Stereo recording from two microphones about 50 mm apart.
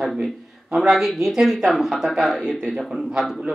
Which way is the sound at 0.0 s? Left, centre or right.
Centre.